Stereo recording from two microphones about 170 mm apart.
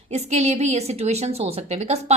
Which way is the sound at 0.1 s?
40° right (ahead or behind).